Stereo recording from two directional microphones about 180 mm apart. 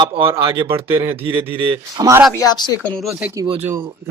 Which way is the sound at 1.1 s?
30° right (ahead or behind).